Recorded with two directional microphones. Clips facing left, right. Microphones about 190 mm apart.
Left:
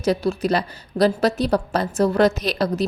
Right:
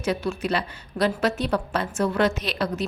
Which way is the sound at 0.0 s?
35° left (ahead or behind).